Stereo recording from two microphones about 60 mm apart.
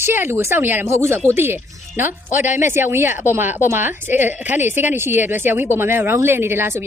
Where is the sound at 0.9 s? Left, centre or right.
Right.